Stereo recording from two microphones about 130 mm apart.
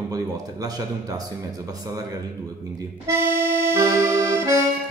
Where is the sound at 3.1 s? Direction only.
20° right (ahead or behind).